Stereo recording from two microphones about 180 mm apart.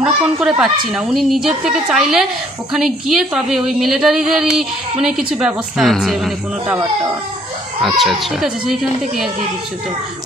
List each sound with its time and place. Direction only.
0.0 s a woman's voice: 5° right (ahead or behind)
7.8 s a woman's voice: centre (ahead or behind)